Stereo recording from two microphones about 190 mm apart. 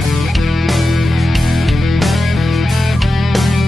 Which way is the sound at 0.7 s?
Centre (ahead or behind).